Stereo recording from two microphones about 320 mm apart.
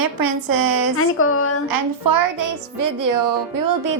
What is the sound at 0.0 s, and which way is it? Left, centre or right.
Speech, right.